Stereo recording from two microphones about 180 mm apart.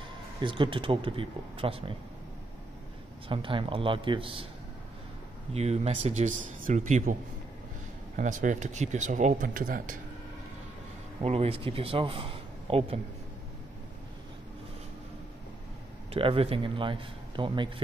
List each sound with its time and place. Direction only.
0.4 s a man's voice: 30° right (ahead or behind)
3.3 s a man's voice: 30° right (ahead or behind)
5.5 s a man's voice: 35° right (ahead or behind)
8.2 s speech: 45° right (ahead or behind)
11.2 s a man's voice: 35° right (ahead or behind)
16.1 s a man's voice: 30° right (ahead or behind)